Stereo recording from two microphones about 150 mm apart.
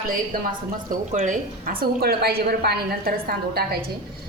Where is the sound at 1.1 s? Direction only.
60° right (ahead or behind).